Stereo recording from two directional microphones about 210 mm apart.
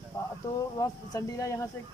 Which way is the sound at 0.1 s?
15° left (ahead or behind).